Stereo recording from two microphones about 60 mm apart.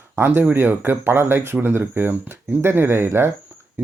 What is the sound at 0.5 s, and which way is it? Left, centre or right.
Speech, right.